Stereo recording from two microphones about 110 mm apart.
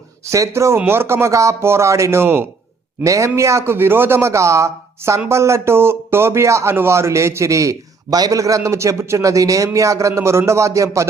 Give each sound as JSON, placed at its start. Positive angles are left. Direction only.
{"t": 0.3, "sound": "speech", "side_deg": -25}